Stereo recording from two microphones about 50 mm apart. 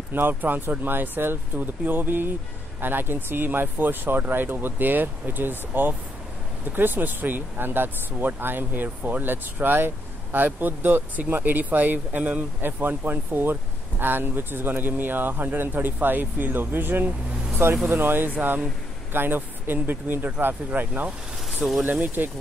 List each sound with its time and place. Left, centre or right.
0.1 s speech: right
21.6 s speech: centre